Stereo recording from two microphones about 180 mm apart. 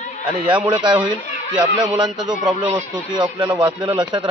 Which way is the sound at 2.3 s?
10° right (ahead or behind).